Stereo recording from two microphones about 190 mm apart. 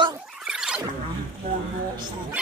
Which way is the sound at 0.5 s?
5° right (ahead or behind).